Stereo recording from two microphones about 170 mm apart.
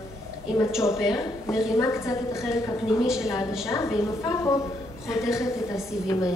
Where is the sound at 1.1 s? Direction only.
20° left (ahead or behind).